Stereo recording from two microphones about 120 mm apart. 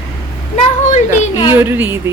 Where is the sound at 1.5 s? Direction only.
15° right (ahead or behind).